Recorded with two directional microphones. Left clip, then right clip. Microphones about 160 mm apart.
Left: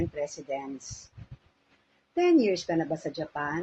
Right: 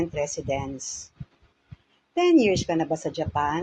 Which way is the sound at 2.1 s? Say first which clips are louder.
Right 4 dB; 30° right (ahead or behind).